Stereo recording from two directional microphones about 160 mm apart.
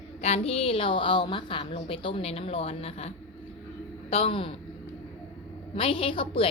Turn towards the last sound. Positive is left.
turn(degrees=35)  # may be behind; listen again after turning